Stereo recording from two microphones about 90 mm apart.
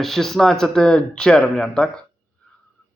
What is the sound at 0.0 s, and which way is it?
Speech, centre (ahead or behind).